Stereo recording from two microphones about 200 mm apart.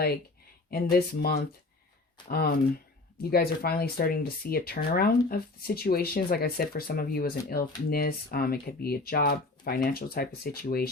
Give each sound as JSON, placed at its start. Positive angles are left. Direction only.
{"t": 0.7, "sound": "speech", "side_deg": 50}